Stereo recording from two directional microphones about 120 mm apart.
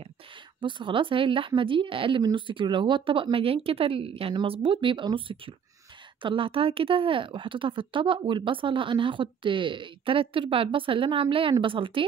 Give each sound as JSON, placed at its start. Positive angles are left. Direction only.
{"t": 0.6, "sound": "a woman's voice", "side_deg": -45}